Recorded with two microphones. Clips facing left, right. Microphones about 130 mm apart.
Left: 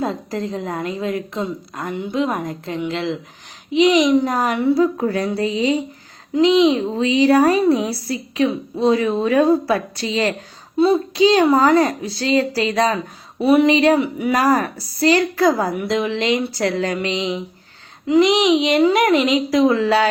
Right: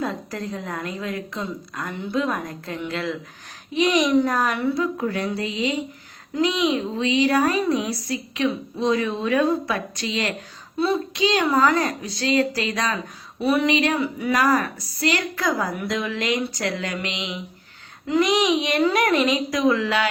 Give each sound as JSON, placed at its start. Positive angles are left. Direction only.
{"t": 0.0, "sound": "a woman's voice", "side_deg": 30}
{"t": 4.8, "sound": "a woman's voice", "side_deg": 35}
{"t": 6.4, "sound": "a woman's voice", "side_deg": 25}
{"t": 18.2, "sound": "a woman's voice", "side_deg": 25}